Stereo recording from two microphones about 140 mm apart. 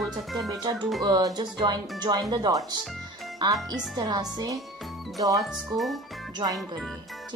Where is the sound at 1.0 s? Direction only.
30° right (ahead or behind).